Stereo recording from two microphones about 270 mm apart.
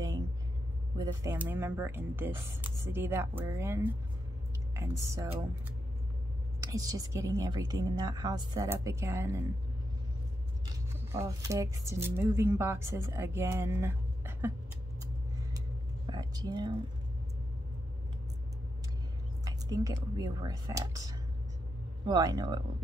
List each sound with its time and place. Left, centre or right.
0.9 s speech: centre
6.6 s speech: centre
11.1 s speech: centre
16.1 s speech: centre
19.4 s speech: centre
22.0 s speech: centre